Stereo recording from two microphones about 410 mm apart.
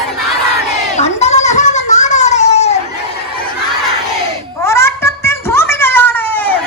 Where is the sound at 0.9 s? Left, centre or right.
Centre.